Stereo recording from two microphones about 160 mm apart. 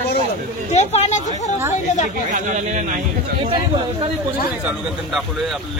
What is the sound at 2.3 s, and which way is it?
Speech, 50° right (ahead or behind).